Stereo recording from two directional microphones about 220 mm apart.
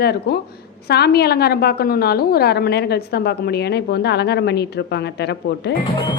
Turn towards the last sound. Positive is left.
turn(degrees=50)  # may be behind; listen again after turning